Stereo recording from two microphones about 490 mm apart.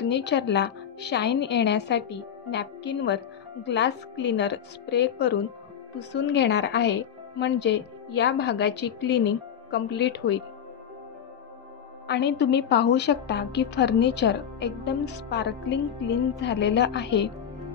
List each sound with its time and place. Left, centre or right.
0.0 s a woman's voice: left
12.1 s a woman's voice: left